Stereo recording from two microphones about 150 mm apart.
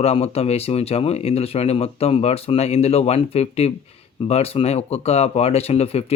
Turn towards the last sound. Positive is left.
turn(degrees=40)  # may be behind; listen again after turning